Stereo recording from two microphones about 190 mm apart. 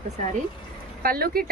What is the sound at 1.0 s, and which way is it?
Speech, 50° right (ahead or behind).